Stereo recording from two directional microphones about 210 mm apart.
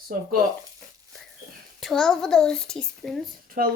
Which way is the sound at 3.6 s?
45° right (ahead or behind).